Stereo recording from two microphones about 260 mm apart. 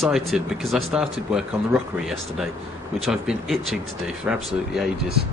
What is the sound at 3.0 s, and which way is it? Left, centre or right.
Speech, centre.